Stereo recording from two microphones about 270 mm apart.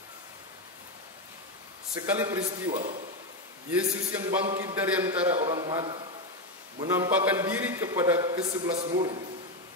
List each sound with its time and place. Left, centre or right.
2.0 s a man's voice: centre